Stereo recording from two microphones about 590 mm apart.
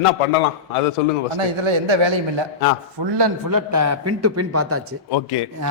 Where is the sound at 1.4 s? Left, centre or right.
Right.